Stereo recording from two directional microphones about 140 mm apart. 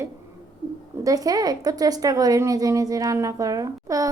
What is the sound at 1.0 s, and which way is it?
A woman's voice, 25° right (ahead or behind).